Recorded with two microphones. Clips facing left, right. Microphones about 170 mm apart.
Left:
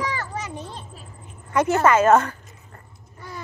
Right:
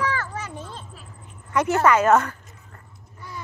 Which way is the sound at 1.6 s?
25° left (ahead or behind).